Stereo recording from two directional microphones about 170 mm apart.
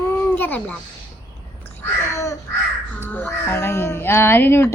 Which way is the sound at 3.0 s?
10° left (ahead or behind).